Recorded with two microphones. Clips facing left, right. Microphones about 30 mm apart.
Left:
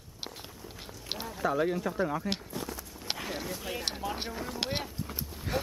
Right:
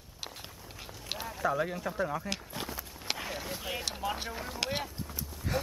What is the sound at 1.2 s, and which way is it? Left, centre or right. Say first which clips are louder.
A man's voice: left 2 dB; centre.